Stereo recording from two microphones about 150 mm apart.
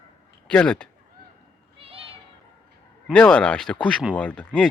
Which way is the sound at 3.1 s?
5° left (ahead or behind).